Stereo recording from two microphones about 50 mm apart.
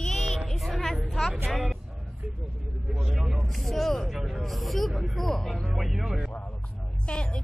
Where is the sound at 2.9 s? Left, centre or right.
Centre.